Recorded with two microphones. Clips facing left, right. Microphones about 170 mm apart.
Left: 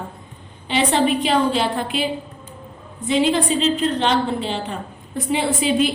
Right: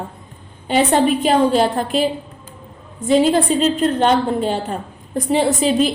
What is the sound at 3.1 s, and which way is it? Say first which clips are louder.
A woman's voice: right 4 dB; 45° right (ahead or behind).